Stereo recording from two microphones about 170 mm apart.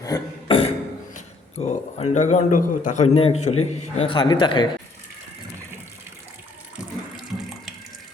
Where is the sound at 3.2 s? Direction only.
35° left (ahead or behind).